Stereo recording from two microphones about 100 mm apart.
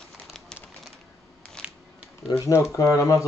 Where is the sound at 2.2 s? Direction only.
30° left (ahead or behind).